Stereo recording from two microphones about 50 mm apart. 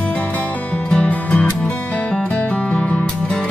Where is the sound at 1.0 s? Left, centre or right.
Left.